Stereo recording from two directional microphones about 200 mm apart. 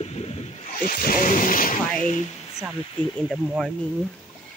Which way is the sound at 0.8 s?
45° left (ahead or behind).